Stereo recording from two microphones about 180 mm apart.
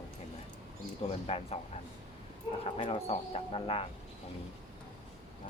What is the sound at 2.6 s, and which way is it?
Speech, 35° left (ahead or behind).